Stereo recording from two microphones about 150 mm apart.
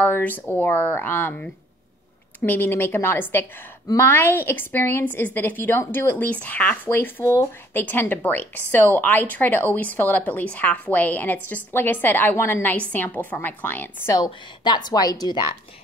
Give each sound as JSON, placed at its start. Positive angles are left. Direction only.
{"t": 0.0, "sound": "a woman's voice", "side_deg": 10}